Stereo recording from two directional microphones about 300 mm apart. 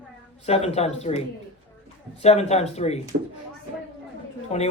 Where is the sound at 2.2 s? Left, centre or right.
Left.